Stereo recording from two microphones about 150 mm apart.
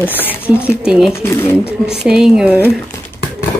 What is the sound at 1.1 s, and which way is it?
Speech, 15° left (ahead or behind).